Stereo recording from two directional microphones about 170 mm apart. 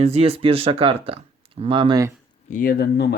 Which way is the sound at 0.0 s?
35° right (ahead or behind).